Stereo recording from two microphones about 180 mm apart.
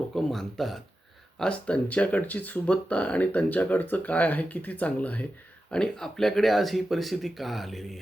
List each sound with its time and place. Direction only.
0.1 s speech: centre (ahead or behind)